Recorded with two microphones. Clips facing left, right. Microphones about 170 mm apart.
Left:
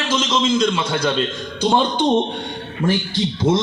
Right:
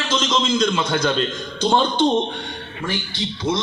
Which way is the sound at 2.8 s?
45° left (ahead or behind).